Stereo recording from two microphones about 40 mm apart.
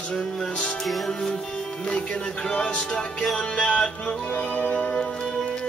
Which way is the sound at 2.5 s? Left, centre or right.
Left.